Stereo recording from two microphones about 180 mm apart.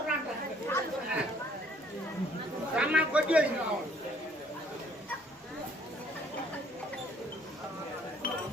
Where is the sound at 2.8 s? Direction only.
5° right (ahead or behind).